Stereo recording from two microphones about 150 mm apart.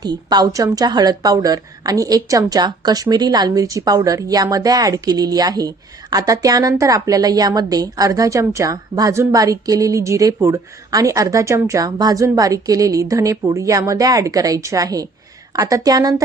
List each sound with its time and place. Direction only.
0.0 s a woman's voice: 25° right (ahead or behind)